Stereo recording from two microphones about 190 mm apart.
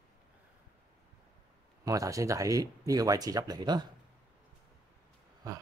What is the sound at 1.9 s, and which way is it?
Speech, 15° right (ahead or behind).